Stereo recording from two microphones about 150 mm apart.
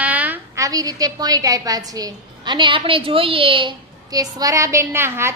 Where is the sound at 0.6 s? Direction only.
25° right (ahead or behind).